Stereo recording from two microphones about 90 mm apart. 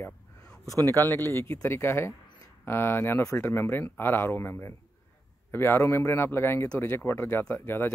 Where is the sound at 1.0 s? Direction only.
25° left (ahead or behind).